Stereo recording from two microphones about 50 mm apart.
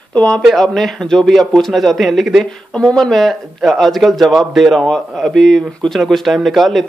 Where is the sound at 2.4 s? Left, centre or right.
Centre.